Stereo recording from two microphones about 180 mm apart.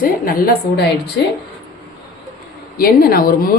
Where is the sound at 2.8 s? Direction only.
55° left (ahead or behind).